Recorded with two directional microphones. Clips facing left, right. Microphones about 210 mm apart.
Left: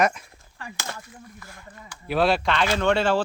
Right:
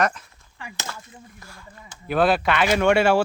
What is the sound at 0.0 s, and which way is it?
Speech, 10° left (ahead or behind).